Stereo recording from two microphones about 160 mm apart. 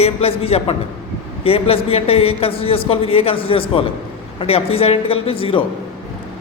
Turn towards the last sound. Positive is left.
turn(degrees=35)  # may be behind; listen again after turning